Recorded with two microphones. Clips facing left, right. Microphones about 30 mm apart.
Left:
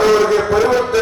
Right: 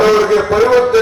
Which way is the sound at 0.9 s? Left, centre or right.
Centre.